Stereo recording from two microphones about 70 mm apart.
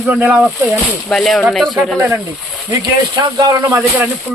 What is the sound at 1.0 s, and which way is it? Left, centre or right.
Speech, centre.